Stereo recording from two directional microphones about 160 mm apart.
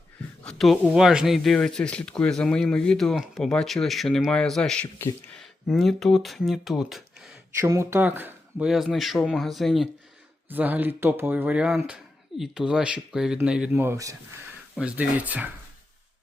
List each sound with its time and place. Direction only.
0.4 s speech: centre (ahead or behind)
7.6 s speech: 20° right (ahead or behind); by 9.9 s centre (ahead or behind)
10.5 s speech: 10° right (ahead or behind)
14.8 s speech: 10° right (ahead or behind)